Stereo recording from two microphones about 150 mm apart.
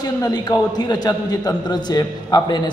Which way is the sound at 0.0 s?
25° left (ahead or behind).